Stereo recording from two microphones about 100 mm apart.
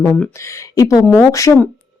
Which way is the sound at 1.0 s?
20° left (ahead or behind).